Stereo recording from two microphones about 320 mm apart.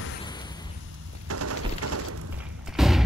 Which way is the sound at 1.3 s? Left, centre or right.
Right.